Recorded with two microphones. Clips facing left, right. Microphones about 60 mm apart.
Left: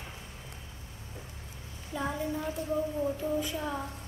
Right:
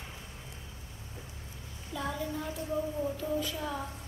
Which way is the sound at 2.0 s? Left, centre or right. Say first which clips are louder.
Left 2 dB; left.